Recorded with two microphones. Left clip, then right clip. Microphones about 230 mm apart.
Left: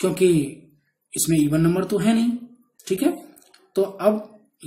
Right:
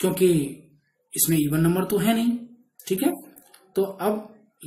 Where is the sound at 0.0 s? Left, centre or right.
Centre.